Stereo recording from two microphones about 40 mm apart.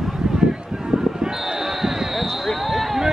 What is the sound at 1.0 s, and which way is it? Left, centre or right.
Basketball bounce, centre.